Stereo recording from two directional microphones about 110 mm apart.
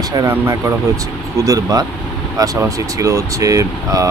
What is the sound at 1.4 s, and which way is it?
Speech, 30° right (ahead or behind).